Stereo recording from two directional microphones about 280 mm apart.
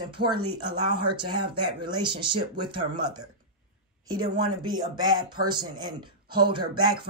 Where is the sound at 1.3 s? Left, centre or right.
Right.